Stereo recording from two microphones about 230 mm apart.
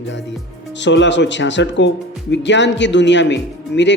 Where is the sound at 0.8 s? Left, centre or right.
Left.